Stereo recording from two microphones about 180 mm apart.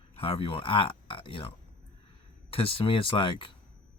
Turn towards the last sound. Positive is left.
turn(degrees=30)  # may be behind; listen again after turning